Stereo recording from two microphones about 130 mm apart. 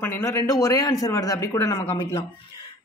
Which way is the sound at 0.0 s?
20° left (ahead or behind).